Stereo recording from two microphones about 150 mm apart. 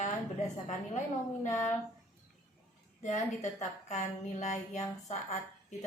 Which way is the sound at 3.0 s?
50° left (ahead or behind).